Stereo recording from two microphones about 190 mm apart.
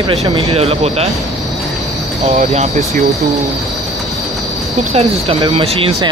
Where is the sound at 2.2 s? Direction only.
35° right (ahead or behind).